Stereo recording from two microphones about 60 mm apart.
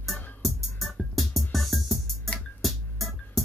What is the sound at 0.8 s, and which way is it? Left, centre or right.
Music, centre.